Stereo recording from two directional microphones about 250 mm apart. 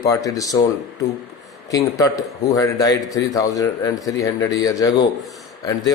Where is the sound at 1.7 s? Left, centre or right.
Centre.